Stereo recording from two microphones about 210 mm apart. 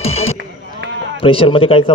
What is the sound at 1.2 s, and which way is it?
Speech, 25° left (ahead or behind).